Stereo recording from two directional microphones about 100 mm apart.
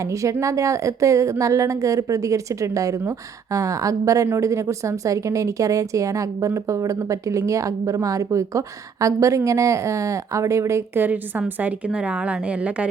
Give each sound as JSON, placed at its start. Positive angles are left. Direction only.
{"t": 0.0, "sound": "a woman's voice", "side_deg": -30}